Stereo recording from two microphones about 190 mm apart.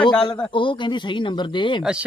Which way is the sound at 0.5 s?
25° left (ahead or behind).